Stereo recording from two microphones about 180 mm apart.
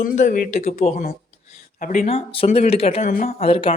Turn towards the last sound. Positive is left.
turn(degrees=30)  # may be behind; listen again after turning